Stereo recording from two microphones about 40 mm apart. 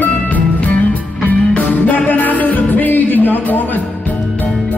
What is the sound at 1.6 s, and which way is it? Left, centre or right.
Music, left.